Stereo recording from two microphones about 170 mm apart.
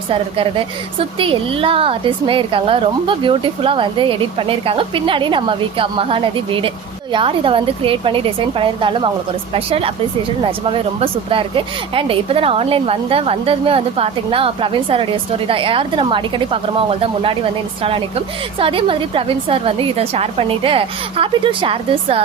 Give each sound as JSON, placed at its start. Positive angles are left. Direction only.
{"t": 0.1, "sound": "speech", "side_deg": -30}